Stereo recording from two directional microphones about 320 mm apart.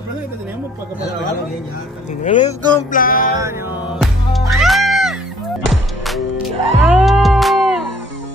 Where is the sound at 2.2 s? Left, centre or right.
Left.